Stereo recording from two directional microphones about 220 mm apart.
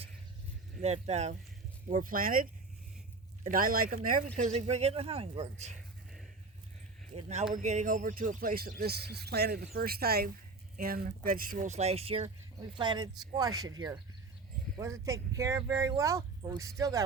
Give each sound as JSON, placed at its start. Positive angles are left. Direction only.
{"t": 0.8, "sound": "speech", "side_deg": -30}
{"t": 7.1, "sound": "speech", "side_deg": -30}